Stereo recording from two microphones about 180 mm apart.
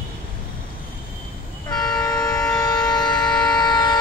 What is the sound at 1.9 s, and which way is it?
Siren, 5° left (ahead or behind).